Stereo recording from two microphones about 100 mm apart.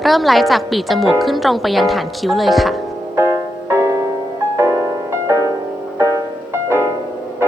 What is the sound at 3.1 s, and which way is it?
Music, 25° right (ahead or behind).